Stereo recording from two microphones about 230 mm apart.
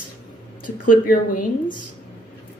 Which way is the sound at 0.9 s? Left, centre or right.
Left.